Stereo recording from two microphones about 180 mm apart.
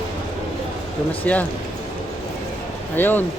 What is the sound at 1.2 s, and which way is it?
Speech, 10° left (ahead or behind).